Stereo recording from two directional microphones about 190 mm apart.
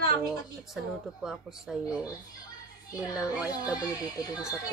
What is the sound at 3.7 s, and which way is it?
Speech, 20° left (ahead or behind).